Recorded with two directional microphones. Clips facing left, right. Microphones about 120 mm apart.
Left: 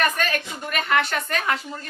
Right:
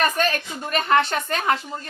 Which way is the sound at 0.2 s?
30° right (ahead or behind).